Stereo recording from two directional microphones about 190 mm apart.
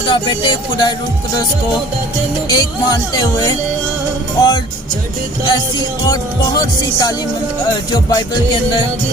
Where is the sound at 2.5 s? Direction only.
20° left (ahead or behind).